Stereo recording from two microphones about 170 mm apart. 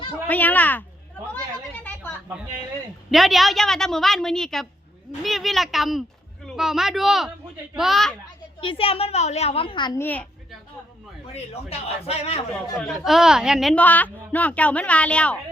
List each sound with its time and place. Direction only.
0.3 s a woman's voice: 10° left (ahead or behind)
1.8 s a sound: 10° left (ahead or behind)
3.1 s speech: centre (ahead or behind)
8.6 s a woman's voice: 30° left (ahead or behind)
10.0 s a woman's voice: 10° left (ahead or behind)
11.7 s a woman's voice: 35° left (ahead or behind)
12.9 s a woman's voice: centre (ahead or behind)